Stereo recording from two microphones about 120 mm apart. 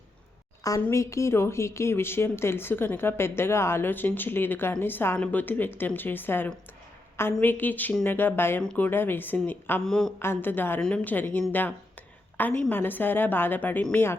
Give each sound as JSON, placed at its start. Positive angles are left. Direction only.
{"t": 0.6, "sound": "a woman's voice", "side_deg": 25}
{"t": 9.8, "sound": "speech", "side_deg": 5}
{"t": 10.2, "sound": "a woman's voice", "side_deg": 20}